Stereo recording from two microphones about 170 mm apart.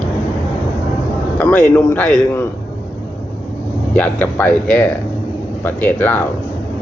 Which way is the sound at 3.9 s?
10° left (ahead or behind).